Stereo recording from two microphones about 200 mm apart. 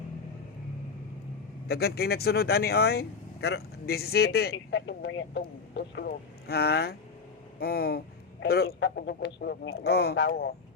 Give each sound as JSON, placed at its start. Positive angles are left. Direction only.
{"t": 1.6, "sound": "speech", "side_deg": 50}